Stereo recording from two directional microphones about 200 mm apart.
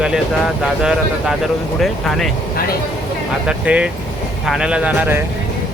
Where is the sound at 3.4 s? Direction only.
5° right (ahead or behind).